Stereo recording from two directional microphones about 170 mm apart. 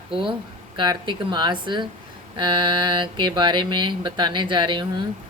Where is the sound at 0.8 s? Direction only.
30° right (ahead or behind).